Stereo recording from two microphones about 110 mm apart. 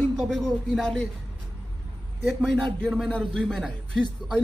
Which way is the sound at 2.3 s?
5° left (ahead or behind).